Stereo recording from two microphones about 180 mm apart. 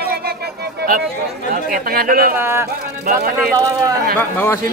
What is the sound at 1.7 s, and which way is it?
Speech, 55° right (ahead or behind).